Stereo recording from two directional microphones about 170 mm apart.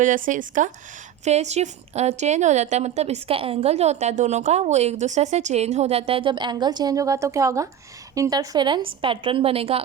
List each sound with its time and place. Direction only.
0.0 s a woman's voice: 50° right (ahead or behind)